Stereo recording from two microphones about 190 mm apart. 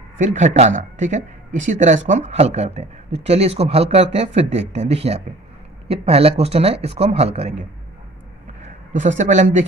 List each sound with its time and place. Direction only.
0.2 s speech: 40° right (ahead or behind)
8.6 s speech: 40° right (ahead or behind)